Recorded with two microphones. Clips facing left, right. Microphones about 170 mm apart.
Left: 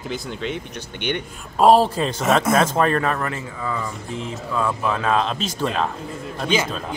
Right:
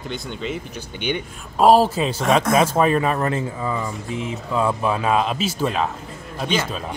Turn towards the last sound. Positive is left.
turn(degrees=-5)  # may be behind; listen again after turning